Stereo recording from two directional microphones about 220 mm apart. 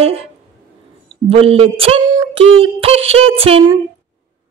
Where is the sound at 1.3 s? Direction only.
25° right (ahead or behind).